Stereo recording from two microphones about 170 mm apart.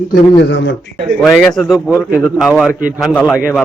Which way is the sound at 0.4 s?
90° left.